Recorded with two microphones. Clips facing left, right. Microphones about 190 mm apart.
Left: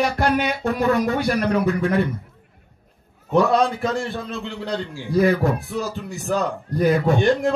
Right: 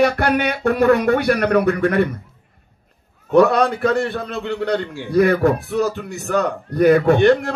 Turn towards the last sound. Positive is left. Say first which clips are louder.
# right 4 dB
turn(degrees=-65)  # may be behind; listen again after turning